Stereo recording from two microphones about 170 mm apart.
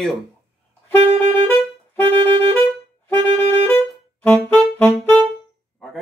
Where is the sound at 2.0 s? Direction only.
35° right (ahead or behind).